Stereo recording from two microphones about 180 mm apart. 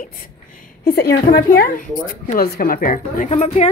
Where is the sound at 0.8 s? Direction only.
60° left (ahead or behind).